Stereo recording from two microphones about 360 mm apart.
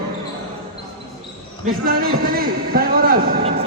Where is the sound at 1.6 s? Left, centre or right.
Right.